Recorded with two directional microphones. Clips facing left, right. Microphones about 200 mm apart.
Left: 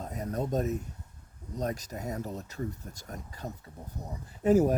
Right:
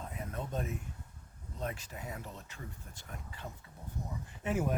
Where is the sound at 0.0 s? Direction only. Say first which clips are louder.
Left 8 dB; 40° left (ahead or behind).